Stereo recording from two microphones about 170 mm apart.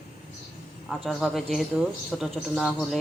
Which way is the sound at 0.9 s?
Centre (ahead or behind).